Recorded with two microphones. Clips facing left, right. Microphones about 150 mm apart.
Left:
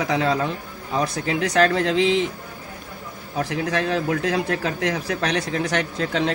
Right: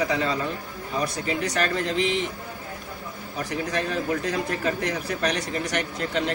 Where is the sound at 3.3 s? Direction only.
90° left.